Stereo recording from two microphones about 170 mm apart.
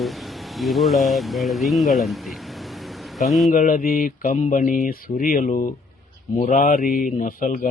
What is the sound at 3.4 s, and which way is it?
A man's voice, 50° left (ahead or behind).